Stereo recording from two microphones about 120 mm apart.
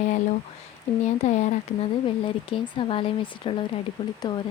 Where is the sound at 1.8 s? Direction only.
45° left (ahead or behind).